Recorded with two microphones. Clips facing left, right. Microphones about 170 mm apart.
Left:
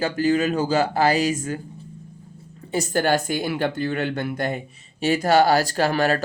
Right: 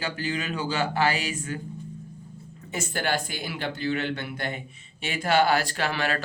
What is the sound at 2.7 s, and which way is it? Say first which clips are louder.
A man's voice: left 7 dB; 40° left (ahead or behind).